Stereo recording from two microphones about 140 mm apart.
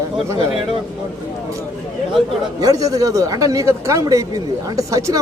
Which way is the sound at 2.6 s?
25° right (ahead or behind).